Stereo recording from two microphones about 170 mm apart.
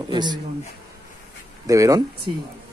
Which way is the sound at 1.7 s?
20° right (ahead or behind).